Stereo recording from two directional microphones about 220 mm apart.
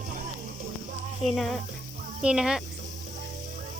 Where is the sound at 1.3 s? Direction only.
Centre (ahead or behind).